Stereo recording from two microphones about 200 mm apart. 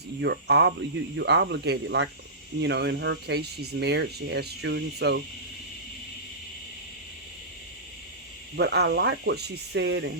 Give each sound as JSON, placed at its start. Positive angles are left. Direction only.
{"t": 0.2, "sound": "speech", "side_deg": -55}
{"t": 8.5, "sound": "speech", "side_deg": -55}